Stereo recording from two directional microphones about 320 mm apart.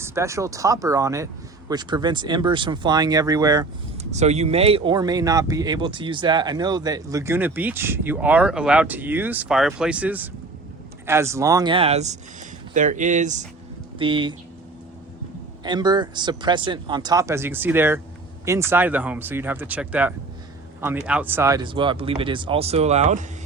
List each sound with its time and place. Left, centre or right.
0.0 s speech: centre
15.6 s speech: centre